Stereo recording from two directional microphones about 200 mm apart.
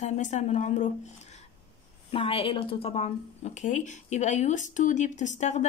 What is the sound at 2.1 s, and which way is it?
A woman's voice, 25° left (ahead or behind).